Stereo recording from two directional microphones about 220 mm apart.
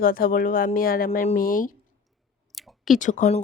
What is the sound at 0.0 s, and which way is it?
A woman's voice, 40° left (ahead or behind).